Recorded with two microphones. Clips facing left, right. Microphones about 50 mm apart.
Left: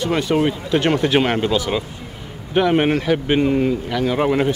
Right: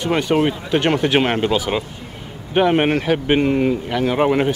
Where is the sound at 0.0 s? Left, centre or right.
Centre.